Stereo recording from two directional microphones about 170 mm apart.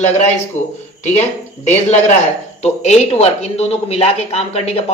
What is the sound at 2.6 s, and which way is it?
Speech, 40° left (ahead or behind).